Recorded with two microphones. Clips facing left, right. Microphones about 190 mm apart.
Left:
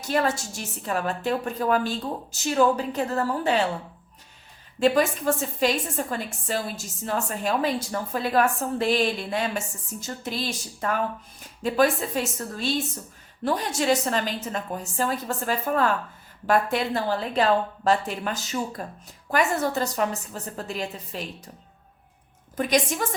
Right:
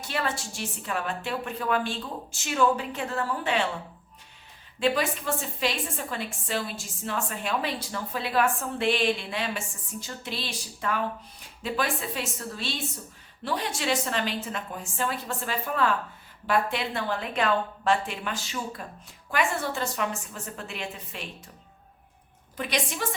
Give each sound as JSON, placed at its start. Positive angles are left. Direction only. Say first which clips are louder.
{"t": 0.1, "sound": "a woman's voice", "louder": "left 7 dB", "side_deg": 45}
{"t": 4.8, "sound": "a woman's voice", "louder": "left 5 dB", "side_deg": 45}
{"t": 22.5, "sound": "a woman's voice", "louder": "left 7 dB", "side_deg": 45}